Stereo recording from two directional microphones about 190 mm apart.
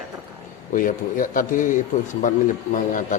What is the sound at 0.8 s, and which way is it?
A man's voice, 45° left (ahead or behind).